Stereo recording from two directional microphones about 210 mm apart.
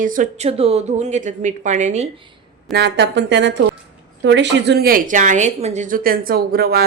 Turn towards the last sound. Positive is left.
turn(degrees=-45)  # may be behind; listen again after turning